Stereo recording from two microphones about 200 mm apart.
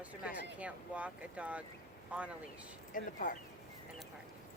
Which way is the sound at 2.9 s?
40° left (ahead or behind).